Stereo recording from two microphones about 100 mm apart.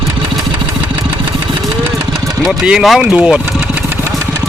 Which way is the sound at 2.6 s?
Centre (ahead or behind).